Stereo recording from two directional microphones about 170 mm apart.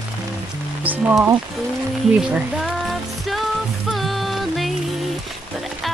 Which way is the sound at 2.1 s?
5° right (ahead or behind).